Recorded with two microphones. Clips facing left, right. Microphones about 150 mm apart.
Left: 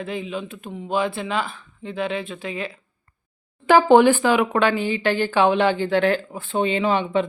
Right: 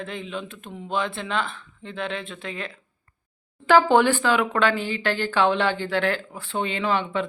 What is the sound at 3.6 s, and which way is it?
Speech, 15° left (ahead or behind).